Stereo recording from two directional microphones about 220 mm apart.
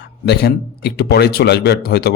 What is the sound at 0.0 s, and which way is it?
Speech, 50° left (ahead or behind).